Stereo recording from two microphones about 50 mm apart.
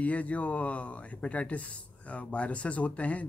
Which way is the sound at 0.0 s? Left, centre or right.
Left.